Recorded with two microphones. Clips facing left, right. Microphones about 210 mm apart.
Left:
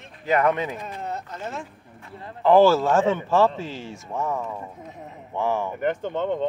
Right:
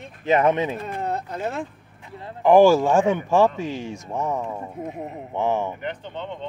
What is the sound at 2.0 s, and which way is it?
Speech, 15° right (ahead or behind).